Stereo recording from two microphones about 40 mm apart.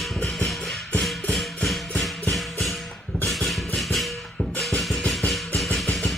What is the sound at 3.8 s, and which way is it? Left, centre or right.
Music, centre.